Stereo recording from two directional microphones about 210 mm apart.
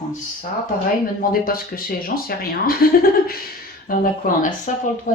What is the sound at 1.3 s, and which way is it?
Speech, 45° left (ahead or behind).